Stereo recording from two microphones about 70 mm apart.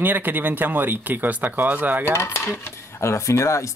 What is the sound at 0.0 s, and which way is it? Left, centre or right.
Speech, right.